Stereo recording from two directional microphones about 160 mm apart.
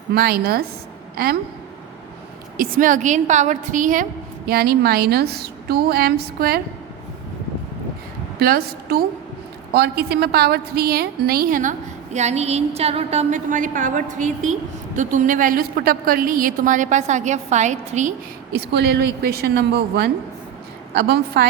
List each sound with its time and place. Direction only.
0.1 s a woman's voice: 75° right (ahead or behind)
2.6 s a woman's voice: 60° right (ahead or behind)
4.4 s a woman's voice: 75° right (ahead or behind)
8.4 s a woman's voice: 75° right (ahead or behind); by 11.7 s 60° right (ahead or behind)
12.1 s a woman's voice: 45° right (ahead or behind)
18.5 s a woman's voice: 90° right
21.4 s a woman's voice: 90° right